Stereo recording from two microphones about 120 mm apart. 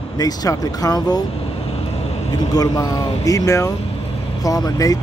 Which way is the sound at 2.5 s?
30° left (ahead or behind).